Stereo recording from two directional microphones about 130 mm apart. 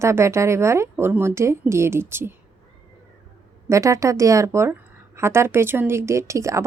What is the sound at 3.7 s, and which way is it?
A woman's voice, 25° right (ahead or behind).